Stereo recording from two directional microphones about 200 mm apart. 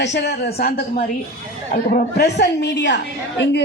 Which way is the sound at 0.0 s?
55° left (ahead or behind).